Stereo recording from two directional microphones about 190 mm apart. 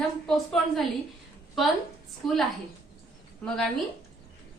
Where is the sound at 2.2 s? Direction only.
Centre (ahead or behind).